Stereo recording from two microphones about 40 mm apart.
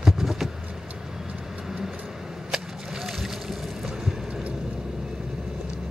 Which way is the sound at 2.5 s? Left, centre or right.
Centre.